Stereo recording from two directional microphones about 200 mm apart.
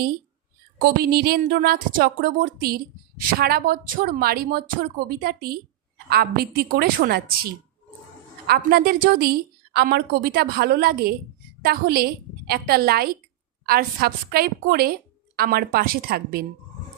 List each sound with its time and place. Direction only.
0.8 s a woman's voice: 50° right (ahead or behind)
8.4 s a woman's voice: 50° right (ahead or behind)